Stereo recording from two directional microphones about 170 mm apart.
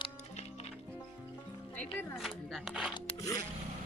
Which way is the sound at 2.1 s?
Centre (ahead or behind).